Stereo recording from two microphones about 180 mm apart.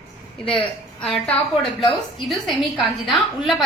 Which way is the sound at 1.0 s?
5° left (ahead or behind).